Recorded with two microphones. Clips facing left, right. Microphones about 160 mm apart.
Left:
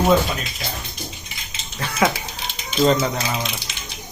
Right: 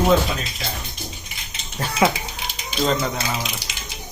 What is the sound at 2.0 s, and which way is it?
Speech, 20° right (ahead or behind).